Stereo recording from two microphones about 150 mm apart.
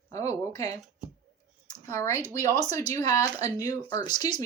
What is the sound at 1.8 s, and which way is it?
Speech, 20° left (ahead or behind).